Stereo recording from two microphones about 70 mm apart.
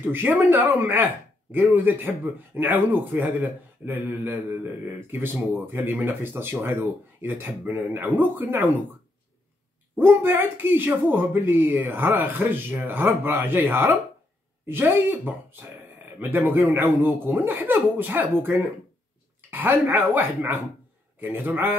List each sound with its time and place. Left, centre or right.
0.0 s speech: right
9.9 s speech: right